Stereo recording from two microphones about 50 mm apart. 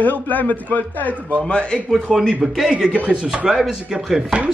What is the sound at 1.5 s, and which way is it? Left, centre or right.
Speech, left.